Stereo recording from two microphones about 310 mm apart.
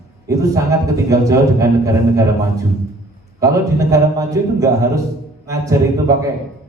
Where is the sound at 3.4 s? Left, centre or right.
Centre.